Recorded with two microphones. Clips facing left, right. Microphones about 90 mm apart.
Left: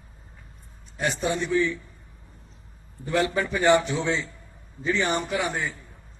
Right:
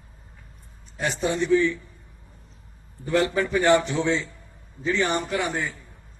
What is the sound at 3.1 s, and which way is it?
A man's voice, 10° left (ahead or behind).